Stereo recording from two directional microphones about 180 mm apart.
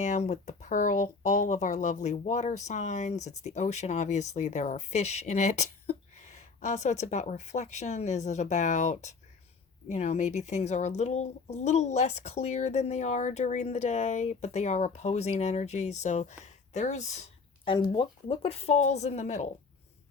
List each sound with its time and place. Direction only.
0.0 s speech: 40° left (ahead or behind)
17.9 s speech: 30° left (ahead or behind)